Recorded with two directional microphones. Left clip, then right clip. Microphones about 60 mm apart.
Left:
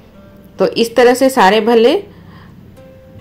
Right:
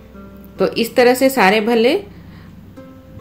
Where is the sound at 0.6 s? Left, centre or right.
Left.